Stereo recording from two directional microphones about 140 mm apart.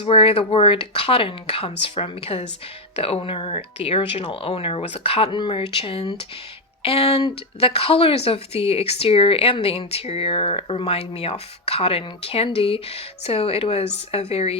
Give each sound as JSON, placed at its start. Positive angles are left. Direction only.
{"t": 0.0, "sound": "speech", "side_deg": 40}